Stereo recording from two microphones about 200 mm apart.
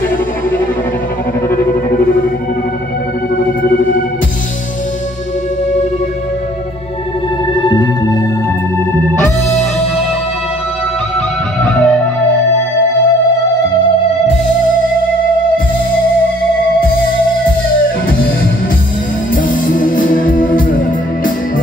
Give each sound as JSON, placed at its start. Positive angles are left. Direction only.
{"t": 1.5, "sound": "music", "side_deg": 10}
{"t": 3.7, "sound": "music", "side_deg": 45}
{"t": 7.6, "sound": "music", "side_deg": 20}
{"t": 9.2, "sound": "music", "side_deg": 5}
{"t": 11.7, "sound": "music", "side_deg": 5}
{"t": 19.3, "sound": "music", "side_deg": 45}